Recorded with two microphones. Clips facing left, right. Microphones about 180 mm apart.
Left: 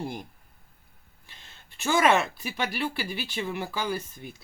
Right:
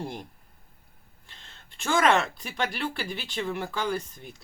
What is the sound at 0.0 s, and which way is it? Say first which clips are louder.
Speech: left 1 dB; 5° left (ahead or behind).